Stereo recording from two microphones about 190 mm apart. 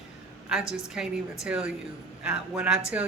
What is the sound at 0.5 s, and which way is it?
A woman's voice, 5° right (ahead or behind).